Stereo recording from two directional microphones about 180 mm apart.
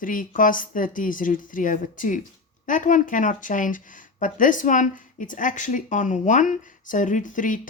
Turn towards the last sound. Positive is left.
turn(degrees=45)  # may be behind; listen again after turning